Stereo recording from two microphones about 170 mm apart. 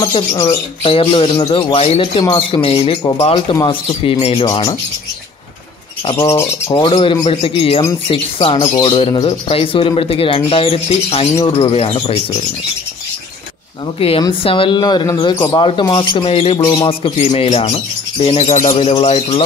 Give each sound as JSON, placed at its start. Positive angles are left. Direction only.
{"t": 0.0, "sound": "speech", "side_deg": 20}
{"t": 0.8, "sound": "speech", "side_deg": 30}
{"t": 1.7, "sound": "speech", "side_deg": 35}
{"t": 6.3, "sound": "speech", "side_deg": 25}
{"t": 13.9, "sound": "speech", "side_deg": 35}
{"t": 18.5, "sound": "speech", "side_deg": 45}